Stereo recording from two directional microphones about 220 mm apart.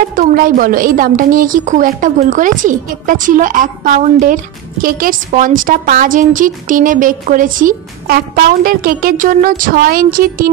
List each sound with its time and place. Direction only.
0.1 s a woman's voice: 40° right (ahead or behind)